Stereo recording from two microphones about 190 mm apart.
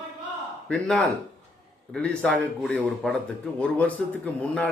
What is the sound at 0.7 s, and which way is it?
Speech, 5° left (ahead or behind).